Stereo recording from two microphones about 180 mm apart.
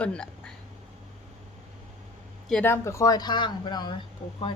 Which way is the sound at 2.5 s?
10° left (ahead or behind).